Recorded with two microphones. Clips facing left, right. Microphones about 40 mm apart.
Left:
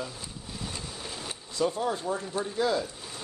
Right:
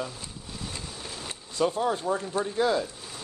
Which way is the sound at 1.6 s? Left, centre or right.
Right.